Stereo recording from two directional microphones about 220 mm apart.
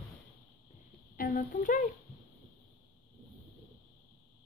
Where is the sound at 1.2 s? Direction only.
35° left (ahead or behind).